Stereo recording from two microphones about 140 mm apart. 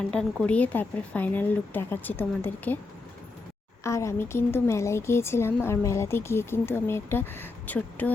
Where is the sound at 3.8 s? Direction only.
20° left (ahead or behind).